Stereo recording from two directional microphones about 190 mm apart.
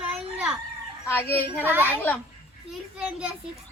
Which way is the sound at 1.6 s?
10° right (ahead or behind).